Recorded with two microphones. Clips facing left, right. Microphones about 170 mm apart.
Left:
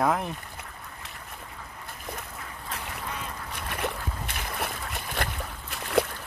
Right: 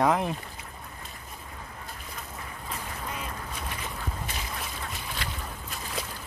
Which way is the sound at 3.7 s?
60° left (ahead or behind).